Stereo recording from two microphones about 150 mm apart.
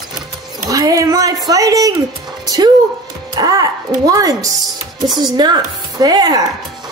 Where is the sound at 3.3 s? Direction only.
25° right (ahead or behind).